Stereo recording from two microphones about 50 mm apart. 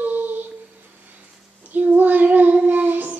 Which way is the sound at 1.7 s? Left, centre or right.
Right.